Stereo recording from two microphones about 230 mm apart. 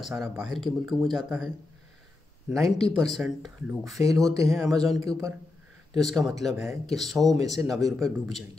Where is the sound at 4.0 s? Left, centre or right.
Centre.